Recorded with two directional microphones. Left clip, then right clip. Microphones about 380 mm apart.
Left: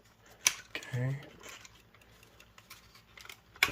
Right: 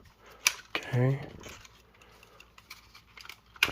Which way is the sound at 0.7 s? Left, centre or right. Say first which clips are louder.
Right 7 dB; centre.